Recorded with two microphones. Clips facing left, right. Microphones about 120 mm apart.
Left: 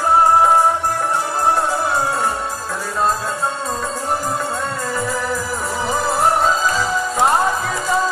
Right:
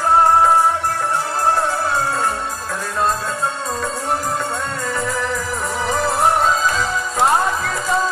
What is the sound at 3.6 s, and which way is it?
Music, centre (ahead or behind).